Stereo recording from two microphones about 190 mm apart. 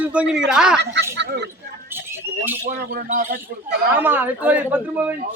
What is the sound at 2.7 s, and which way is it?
Speech, 45° right (ahead or behind).